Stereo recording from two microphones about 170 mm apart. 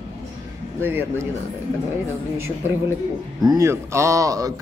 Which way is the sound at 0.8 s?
10° right (ahead or behind).